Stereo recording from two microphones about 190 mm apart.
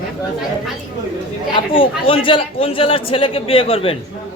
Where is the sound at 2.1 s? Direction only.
25° left (ahead or behind).